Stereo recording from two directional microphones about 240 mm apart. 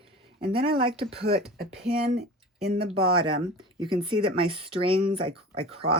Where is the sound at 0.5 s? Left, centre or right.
Right.